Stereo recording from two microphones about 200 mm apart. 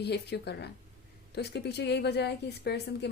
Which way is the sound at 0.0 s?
55° left (ahead or behind).